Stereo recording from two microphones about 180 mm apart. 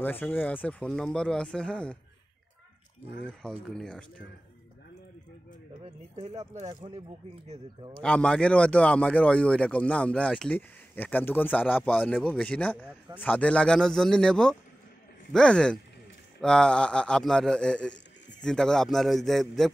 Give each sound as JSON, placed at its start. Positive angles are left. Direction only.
{"t": 0.0, "sound": "speech", "side_deg": 10}
{"t": 3.6, "sound": "speech", "side_deg": 5}
{"t": 6.8, "sound": "speech", "side_deg": -35}
{"t": 8.0, "sound": "speech", "side_deg": 5}